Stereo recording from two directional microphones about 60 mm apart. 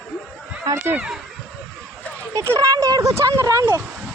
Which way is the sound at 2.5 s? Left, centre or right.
Right.